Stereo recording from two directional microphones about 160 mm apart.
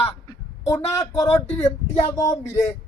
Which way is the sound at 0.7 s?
20° left (ahead or behind).